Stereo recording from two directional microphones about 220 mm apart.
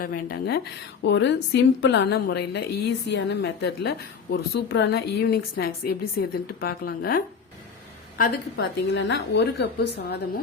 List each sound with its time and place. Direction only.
0.0 s a woman's voice: 45° left (ahead or behind)
8.2 s a woman's voice: 45° left (ahead or behind)